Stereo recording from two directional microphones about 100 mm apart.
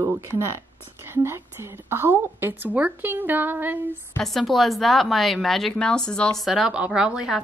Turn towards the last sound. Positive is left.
turn(degrees=-10)  # may be behind; listen again after turning